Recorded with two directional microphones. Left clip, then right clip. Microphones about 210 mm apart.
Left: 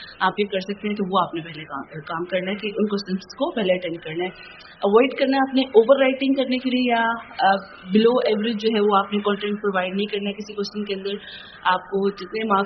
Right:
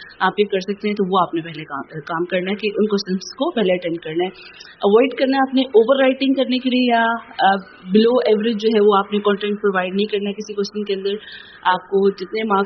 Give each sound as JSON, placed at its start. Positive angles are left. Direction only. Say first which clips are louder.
{"t": 0.2, "sound": "a man's voice", "louder": "right 4 dB", "side_deg": -30}